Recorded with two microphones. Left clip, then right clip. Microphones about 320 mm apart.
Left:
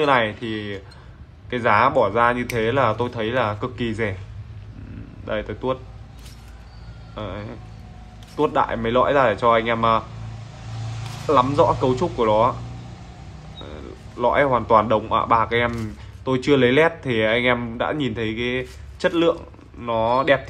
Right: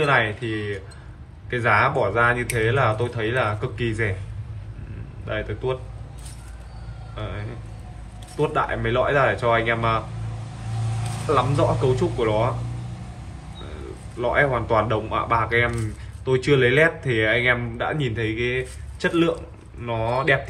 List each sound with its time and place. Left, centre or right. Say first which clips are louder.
0.0 s speech: left 1 dB; left
5.2 s speech: left 2 dB; centre
7.2 s speech: left 3 dB; centre
11.3 s speech: left 4 dB; centre
14.2 s speech: left 3 dB; centre